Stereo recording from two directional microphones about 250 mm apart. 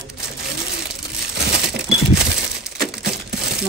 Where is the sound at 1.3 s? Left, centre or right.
Right.